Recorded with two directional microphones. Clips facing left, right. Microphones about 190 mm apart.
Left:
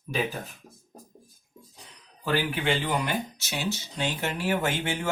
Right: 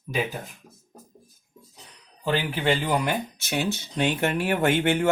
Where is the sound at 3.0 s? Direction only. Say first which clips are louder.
Right 3 dB; 55° right (ahead or behind).